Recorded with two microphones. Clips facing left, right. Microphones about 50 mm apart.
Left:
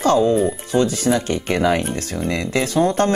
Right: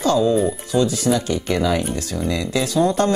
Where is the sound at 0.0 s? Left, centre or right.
Left.